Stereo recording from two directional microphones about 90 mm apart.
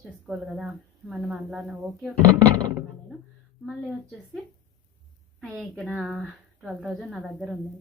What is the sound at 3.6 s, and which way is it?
Speech, 5° left (ahead or behind).